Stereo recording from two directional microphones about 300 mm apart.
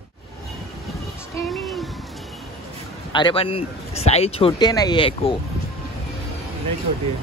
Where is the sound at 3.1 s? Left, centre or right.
Centre.